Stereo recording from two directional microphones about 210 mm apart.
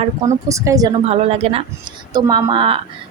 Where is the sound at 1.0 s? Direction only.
30° right (ahead or behind).